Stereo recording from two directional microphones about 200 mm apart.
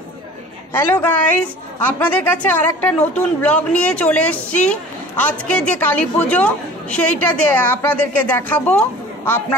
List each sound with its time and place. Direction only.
0.7 s a woman's voice: 10° left (ahead or behind)